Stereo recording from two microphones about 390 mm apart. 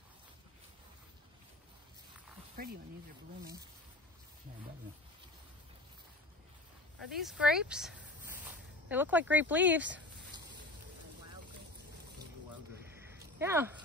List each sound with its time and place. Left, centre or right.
2.5 s speech: right
7.1 s speech: centre
8.5 s a sound: centre
9.3 s speech: centre
13.4 s speech: centre